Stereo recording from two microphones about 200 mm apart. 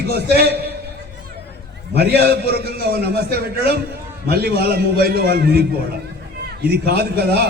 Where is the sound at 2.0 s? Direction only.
55° right (ahead or behind).